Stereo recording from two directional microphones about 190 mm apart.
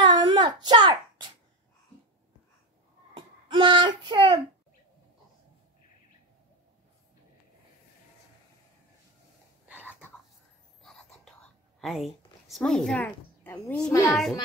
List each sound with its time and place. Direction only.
0.0 s child singing: 25° right (ahead or behind)
3.2 s speech: 25° right (ahead or behind)
9.7 s a sound: 10° right (ahead or behind)
10.8 s whispering: centre (ahead or behind)
11.8 s a woman's voice: centre (ahead or behind)